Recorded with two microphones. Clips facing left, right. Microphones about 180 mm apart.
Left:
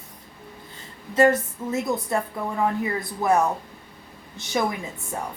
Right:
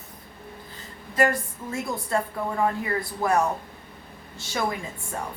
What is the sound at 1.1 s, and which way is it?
A woman's voice, 25° left (ahead or behind).